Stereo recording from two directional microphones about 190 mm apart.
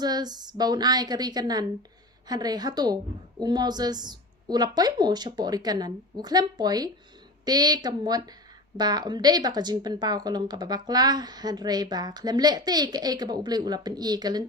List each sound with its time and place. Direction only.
0.0 s speech: 20° right (ahead or behind)